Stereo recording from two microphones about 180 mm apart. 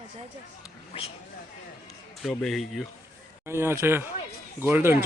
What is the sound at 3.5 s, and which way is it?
Speech, 15° right (ahead or behind).